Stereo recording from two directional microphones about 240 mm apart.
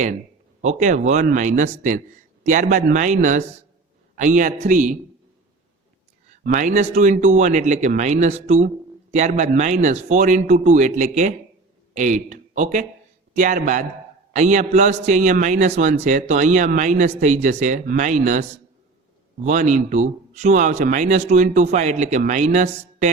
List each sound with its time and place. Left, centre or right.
0.6 s a man's voice: right
6.4 s a man's voice: right
19.5 s a man's voice: right